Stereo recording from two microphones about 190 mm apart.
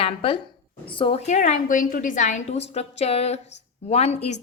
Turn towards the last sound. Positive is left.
turn(degrees=35)  # may be behind; listen again after turning